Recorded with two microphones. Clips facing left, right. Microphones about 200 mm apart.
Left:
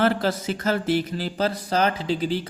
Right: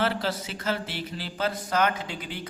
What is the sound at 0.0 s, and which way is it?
A man's voice, 50° left (ahead or behind).